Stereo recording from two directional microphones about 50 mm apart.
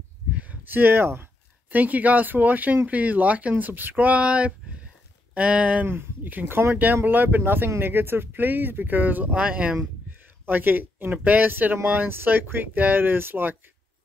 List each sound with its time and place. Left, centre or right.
0.4 s a sound: right
0.7 s a sound: right
1.8 s speech: right
5.9 s speech: right
9.3 s speech: right
10.4 s speech: right